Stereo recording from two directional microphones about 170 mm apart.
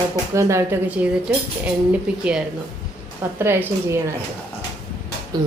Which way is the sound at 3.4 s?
15° right (ahead or behind).